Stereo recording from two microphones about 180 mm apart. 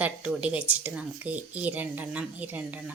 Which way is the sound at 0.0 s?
5° right (ahead or behind).